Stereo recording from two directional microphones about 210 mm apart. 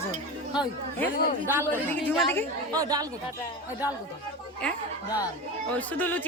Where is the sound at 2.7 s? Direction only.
15° right (ahead or behind).